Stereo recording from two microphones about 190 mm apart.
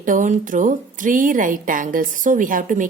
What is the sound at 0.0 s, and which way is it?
A woman's voice, 45° right (ahead or behind).